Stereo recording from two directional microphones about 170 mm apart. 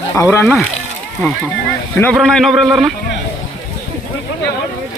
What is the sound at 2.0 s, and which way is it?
Speech, 5° left (ahead or behind).